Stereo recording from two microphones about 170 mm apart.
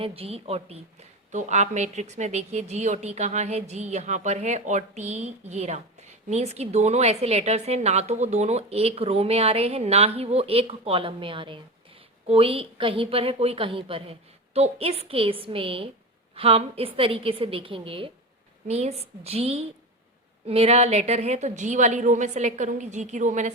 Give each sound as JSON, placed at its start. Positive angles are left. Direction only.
{"t": 0.0, "sound": "a woman's voice", "side_deg": -35}